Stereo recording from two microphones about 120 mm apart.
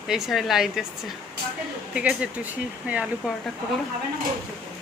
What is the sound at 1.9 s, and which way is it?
Speech, 10° right (ahead or behind).